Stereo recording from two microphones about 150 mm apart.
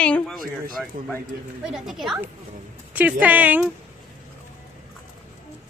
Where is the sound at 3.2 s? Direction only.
10° right (ahead or behind).